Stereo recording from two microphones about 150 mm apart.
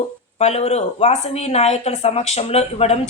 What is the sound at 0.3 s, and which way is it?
A woman's voice, 45° left (ahead or behind).